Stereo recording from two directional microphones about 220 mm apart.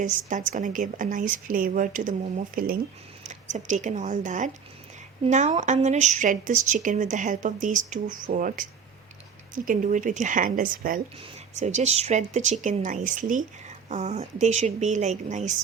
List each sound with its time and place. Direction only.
0.0 s speech: 35° right (ahead or behind)
9.6 s speech: 35° right (ahead or behind)